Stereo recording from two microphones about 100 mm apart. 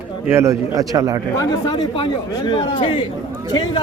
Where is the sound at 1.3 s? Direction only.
40° left (ahead or behind).